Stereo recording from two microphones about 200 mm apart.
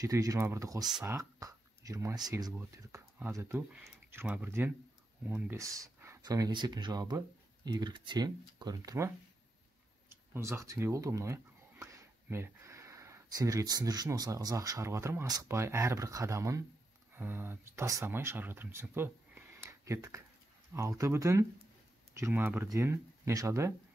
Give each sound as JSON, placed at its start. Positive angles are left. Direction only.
{"t": 0.0, "sound": "speech", "side_deg": -15}
{"t": 0.8, "sound": "speech", "side_deg": 0}
{"t": 1.1, "sound": "speech", "side_deg": -15}